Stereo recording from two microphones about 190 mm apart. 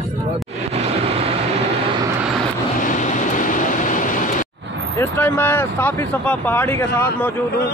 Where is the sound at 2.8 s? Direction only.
40° left (ahead or behind).